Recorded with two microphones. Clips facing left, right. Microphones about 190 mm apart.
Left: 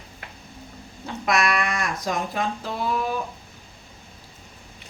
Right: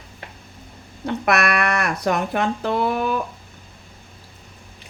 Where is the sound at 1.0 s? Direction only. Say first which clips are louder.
Right 3 dB; 60° right (ahead or behind).